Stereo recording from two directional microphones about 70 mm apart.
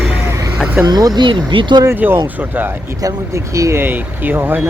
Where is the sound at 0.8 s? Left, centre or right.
Right.